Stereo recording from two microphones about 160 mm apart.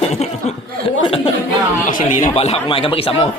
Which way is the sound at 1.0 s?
35° left (ahead or behind).